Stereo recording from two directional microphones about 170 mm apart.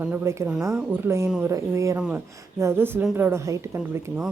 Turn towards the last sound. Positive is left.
turn(degrees=-15)  # may be behind; listen again after turning